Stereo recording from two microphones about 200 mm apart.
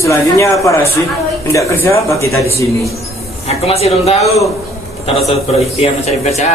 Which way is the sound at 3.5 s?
30° left (ahead or behind).